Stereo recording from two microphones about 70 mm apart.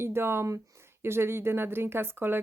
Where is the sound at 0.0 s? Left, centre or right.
Right.